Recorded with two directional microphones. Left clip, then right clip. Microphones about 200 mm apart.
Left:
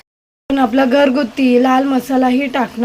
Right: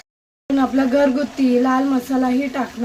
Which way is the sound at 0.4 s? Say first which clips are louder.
Left 5 dB; 30° left (ahead or behind).